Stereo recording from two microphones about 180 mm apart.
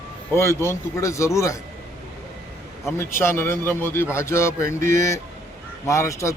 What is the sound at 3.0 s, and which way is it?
Speech, 15° left (ahead or behind).